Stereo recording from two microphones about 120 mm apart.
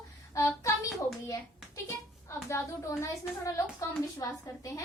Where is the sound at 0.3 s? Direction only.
25° left (ahead or behind).